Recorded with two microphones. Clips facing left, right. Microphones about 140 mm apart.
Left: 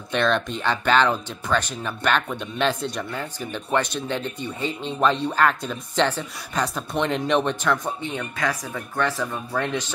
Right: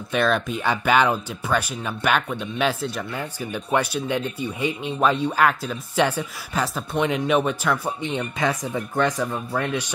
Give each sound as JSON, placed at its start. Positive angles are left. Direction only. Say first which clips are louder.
{"t": 0.1, "sound": "speech", "louder": "right 1 dB", "side_deg": -5}
{"t": 8.1, "sound": "speech", "louder": "right 4 dB", "side_deg": -20}